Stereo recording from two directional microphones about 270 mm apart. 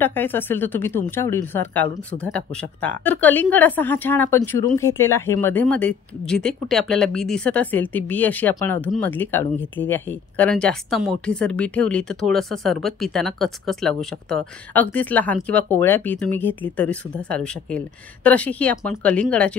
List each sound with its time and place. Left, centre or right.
0.0 s a woman's voice: centre